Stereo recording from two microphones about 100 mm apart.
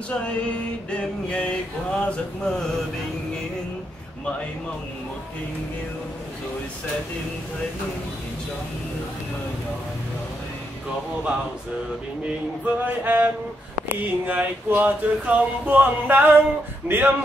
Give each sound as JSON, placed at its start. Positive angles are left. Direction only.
{"t": 0.9, "sound": "male singing", "side_deg": 10}
{"t": 12.6, "sound": "speech", "side_deg": -15}